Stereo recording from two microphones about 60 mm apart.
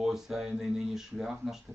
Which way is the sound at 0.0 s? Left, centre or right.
Centre.